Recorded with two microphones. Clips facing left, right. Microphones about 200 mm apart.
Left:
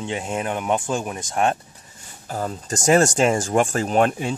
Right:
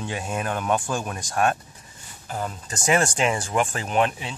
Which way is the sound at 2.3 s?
40° left (ahead or behind).